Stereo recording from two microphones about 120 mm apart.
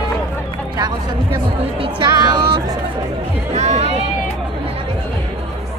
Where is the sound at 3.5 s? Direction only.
65° right (ahead or behind).